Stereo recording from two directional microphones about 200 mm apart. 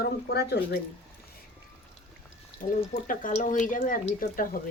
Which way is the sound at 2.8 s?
40° left (ahead or behind).